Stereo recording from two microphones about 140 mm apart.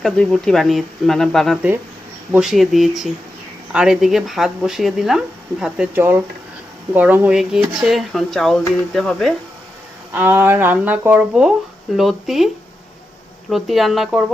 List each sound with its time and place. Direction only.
0.0 s speech: 5° left (ahead or behind)
10.2 s speech: 15° right (ahead or behind)
13.5 s speech: centre (ahead or behind)